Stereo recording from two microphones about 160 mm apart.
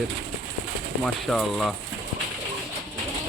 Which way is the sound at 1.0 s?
Centre (ahead or behind).